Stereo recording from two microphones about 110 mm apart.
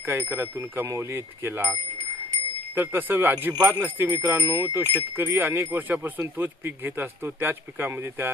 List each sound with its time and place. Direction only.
0.1 s wind chime: 20° right (ahead or behind)
2.7 s wind chime: 20° right (ahead or behind)